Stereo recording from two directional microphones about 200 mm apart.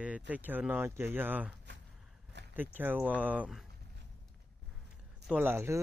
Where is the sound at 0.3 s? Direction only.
10° right (ahead or behind).